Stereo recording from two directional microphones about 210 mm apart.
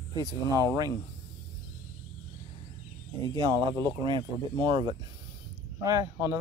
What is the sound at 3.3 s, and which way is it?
Speech, 20° right (ahead or behind).